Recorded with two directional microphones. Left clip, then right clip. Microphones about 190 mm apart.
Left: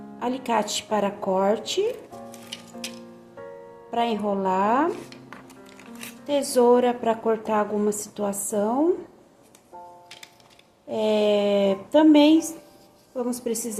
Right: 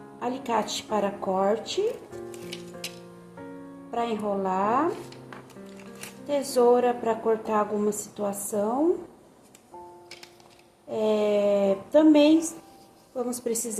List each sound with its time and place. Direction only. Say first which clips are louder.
0.2 s a woman's voice: left 3 dB; 20° left (ahead or behind)
3.9 s a woman's voice: left 3 dB; 25° left (ahead or behind)
6.2 s a woman's voice: left 2 dB; 20° left (ahead or behind)
10.8 s a woman's voice: left 3 dB; 20° left (ahead or behind)